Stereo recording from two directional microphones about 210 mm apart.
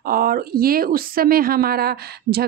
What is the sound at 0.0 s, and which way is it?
A woman's voice, 45° right (ahead or behind).